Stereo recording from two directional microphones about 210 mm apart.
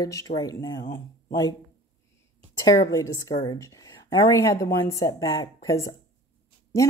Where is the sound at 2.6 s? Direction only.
15° left (ahead or behind).